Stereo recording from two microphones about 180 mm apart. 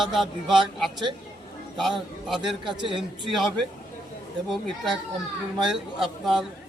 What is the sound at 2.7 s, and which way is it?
Speech, 25° right (ahead or behind).